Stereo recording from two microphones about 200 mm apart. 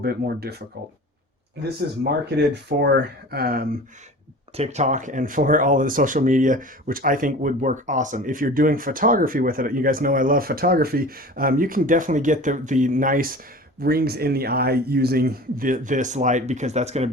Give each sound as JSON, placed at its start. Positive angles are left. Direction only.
{"t": 0.0, "sound": "speech", "side_deg": -50}
{"t": 2.0, "sound": "speech", "side_deg": -55}
{"t": 4.5, "sound": "speech", "side_deg": -35}